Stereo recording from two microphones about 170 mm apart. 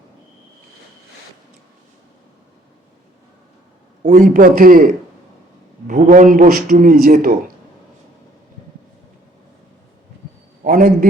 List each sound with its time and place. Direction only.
4.0 s a man's voice: 50° right (ahead or behind)
5.9 s a man's voice: 50° right (ahead or behind)
10.6 s a sound: 55° right (ahead or behind)